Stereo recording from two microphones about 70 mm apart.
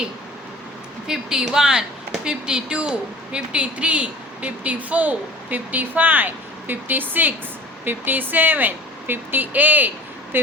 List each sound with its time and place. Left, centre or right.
1.0 s a woman's voice: centre; by 10.5 s right